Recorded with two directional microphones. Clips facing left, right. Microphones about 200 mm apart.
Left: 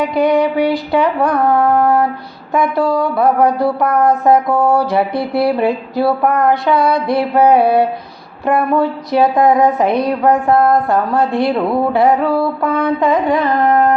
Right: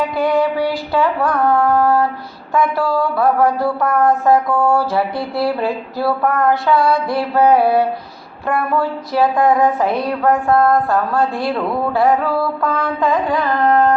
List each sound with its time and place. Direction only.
0.0 s speech: 20° left (ahead or behind)